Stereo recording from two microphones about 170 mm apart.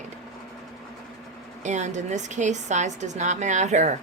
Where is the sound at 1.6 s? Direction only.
45° right (ahead or behind).